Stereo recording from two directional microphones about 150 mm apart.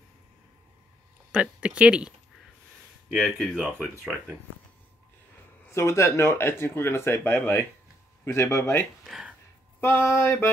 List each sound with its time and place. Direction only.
1.3 s speech: 5° right (ahead or behind)
3.2 s speech: 5° left (ahead or behind)
3.7 s speech: 15° right (ahead or behind)
5.7 s speech: 20° left (ahead or behind)
9.0 s a sound: centre (ahead or behind)
9.8 s speech: 15° left (ahead or behind)